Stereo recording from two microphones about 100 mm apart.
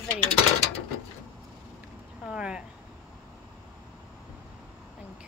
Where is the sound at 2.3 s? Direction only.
10° right (ahead or behind).